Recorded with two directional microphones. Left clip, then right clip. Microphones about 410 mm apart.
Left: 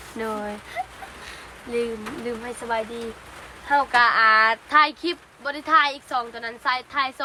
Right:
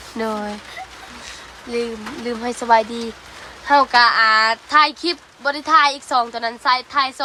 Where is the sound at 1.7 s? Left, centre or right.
Centre.